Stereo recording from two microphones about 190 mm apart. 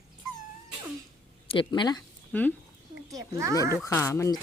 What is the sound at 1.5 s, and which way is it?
Speech, 25° left (ahead or behind).